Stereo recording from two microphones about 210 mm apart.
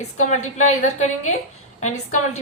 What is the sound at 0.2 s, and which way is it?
Speech, 35° left (ahead or behind).